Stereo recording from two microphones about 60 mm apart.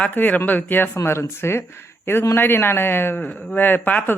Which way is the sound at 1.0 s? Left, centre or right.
Left.